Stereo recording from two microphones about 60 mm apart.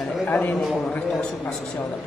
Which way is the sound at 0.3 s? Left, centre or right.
Left.